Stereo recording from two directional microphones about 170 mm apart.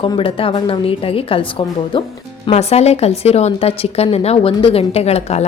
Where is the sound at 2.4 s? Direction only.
40° left (ahead or behind).